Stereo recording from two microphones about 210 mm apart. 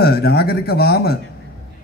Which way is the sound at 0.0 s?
50° left (ahead or behind).